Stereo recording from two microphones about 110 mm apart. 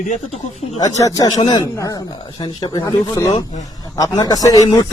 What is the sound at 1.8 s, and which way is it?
Speech, 35° left (ahead or behind).